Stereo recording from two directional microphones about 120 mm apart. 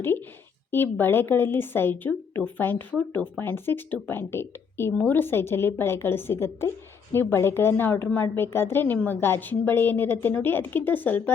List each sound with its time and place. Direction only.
0.0 s a woman's voice: 20° left (ahead or behind)